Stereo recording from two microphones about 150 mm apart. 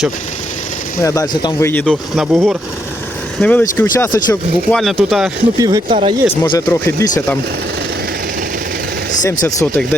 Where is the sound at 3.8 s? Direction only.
20° left (ahead or behind).